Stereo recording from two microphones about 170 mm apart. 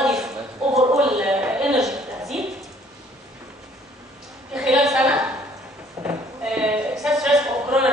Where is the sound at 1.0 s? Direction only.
5° right (ahead or behind).